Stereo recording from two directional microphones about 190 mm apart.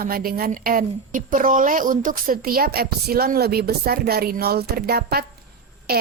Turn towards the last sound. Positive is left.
turn(degrees=-55)  # may be behind; listen again after turning